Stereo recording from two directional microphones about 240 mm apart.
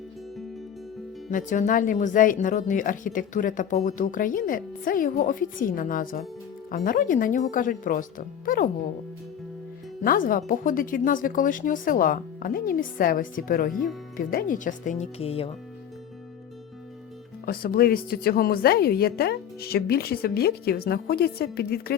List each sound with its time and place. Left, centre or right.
1.3 s speech: left
10.0 s speech: left
17.4 s speech: left